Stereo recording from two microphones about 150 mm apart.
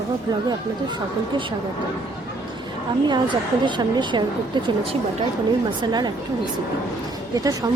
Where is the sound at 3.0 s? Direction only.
30° right (ahead or behind).